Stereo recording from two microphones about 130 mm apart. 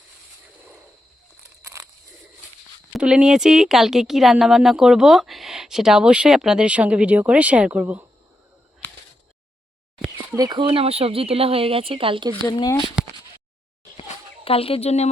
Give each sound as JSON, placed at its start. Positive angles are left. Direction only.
{"t": 1.6, "sound": "a sound", "side_deg": -25}
{"t": 2.9, "sound": "speech", "side_deg": -5}
{"t": 10.3, "sound": "speech", "side_deg": -30}
{"t": 12.5, "sound": "speech", "side_deg": 30}
{"t": 14.4, "sound": "speech", "side_deg": 45}